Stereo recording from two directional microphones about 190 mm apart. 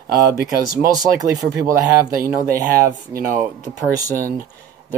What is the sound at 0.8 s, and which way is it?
Speech, 20° right (ahead or behind).